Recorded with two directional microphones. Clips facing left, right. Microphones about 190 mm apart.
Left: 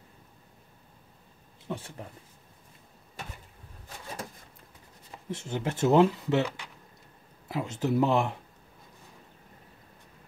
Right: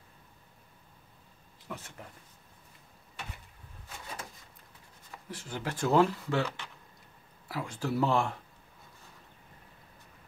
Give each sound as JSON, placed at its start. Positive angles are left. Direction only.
{"t": 1.7, "sound": "speech", "side_deg": 30}
{"t": 5.1, "sound": "speech", "side_deg": 25}